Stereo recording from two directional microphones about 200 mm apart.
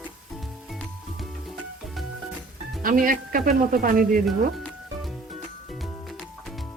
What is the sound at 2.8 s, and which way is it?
Speech, 45° right (ahead or behind).